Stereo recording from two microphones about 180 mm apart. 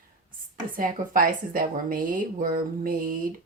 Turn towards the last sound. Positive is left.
turn(degrees=-50)  # may be behind; listen again after turning